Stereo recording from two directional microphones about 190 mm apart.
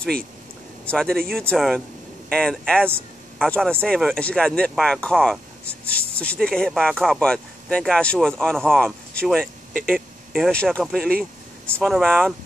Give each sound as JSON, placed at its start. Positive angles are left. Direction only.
{"t": 0.8, "sound": "speech", "side_deg": 5}